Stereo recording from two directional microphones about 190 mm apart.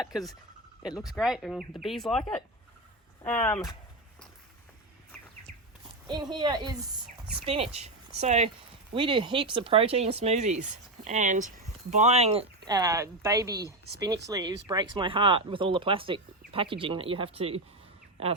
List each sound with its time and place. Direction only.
0.0 s speech: centre (ahead or behind)
6.1 s speech: 25° right (ahead or behind)
12.6 s speech: 20° right (ahead or behind)